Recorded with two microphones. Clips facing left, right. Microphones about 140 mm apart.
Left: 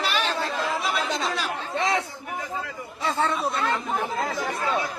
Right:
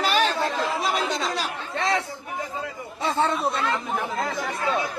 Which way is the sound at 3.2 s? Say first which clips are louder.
Right 1 dB; 25° right (ahead or behind).